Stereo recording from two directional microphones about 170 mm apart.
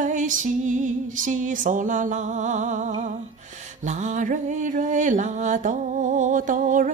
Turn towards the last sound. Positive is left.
turn(degrees=-50)  # may be behind; listen again after turning